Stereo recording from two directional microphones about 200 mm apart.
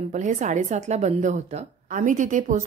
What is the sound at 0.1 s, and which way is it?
A woman's voice, 40° right (ahead or behind).